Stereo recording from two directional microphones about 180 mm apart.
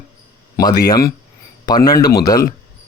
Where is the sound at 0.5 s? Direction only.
20° left (ahead or behind).